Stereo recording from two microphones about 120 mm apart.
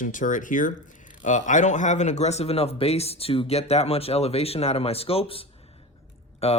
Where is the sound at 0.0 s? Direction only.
90° left.